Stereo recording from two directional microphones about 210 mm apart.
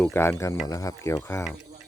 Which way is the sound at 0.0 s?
10° left (ahead or behind).